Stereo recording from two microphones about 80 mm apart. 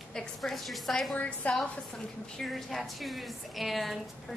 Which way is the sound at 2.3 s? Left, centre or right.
Centre.